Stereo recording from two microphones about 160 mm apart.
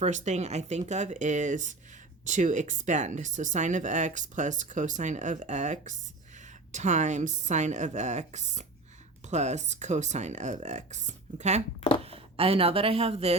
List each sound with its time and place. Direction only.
0.0 s speech: 45° right (ahead or behind)